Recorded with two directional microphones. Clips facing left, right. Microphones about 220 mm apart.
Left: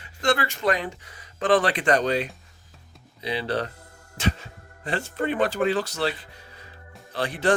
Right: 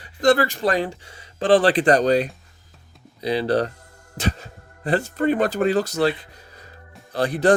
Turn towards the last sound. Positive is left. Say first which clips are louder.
# right 6 dB
turn(degrees=-40)  # may be behind; listen again after turning